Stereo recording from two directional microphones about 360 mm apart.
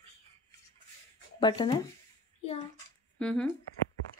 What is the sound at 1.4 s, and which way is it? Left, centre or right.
Speech, centre.